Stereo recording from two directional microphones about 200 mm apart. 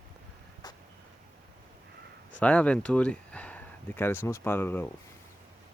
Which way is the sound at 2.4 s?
5° left (ahead or behind).